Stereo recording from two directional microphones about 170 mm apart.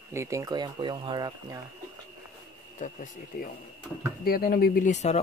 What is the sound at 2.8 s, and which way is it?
Speech, 50° left (ahead or behind).